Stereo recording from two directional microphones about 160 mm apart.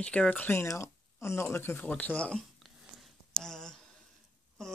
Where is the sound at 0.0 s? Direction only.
5° left (ahead or behind).